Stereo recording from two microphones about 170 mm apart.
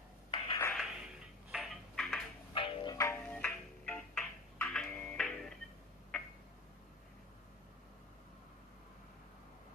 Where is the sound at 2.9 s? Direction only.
10° left (ahead or behind).